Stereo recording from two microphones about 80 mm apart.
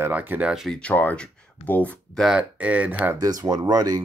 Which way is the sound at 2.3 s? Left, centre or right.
Centre.